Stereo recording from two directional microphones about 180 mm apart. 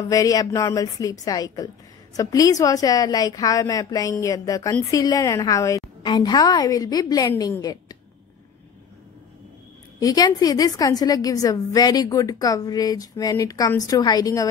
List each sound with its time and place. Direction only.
0.1 s a woman's voice: 20° left (ahead or behind)
9.9 s a woman's voice: 20° left (ahead or behind)